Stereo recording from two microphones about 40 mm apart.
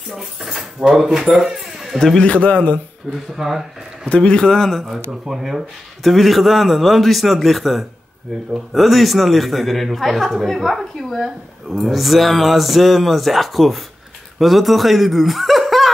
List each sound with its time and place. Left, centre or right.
0.1 s speech: centre
1.4 s music: centre
2.1 s a man's voice: left
3.3 s speech: centre
4.1 s a man's voice: left
4.5 s speech: centre
5.2 s speech: centre